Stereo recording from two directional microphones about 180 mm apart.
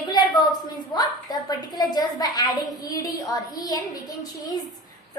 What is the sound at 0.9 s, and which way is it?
A woman's voice, 20° left (ahead or behind).